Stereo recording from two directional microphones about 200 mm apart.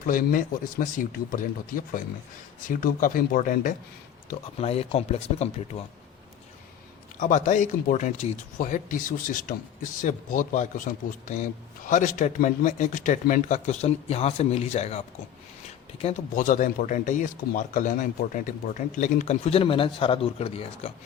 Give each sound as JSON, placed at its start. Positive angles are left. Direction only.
{"t": 0.0, "sound": "speech", "side_deg": 45}
{"t": 4.3, "sound": "speech", "side_deg": 30}
{"t": 7.2, "sound": "speech", "side_deg": 40}